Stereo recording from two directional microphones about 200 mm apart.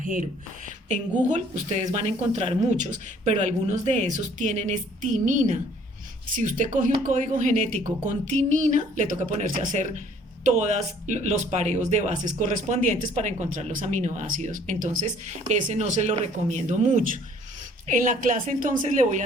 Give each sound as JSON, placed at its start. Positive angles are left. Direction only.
{"t": 0.0, "sound": "speech", "side_deg": -40}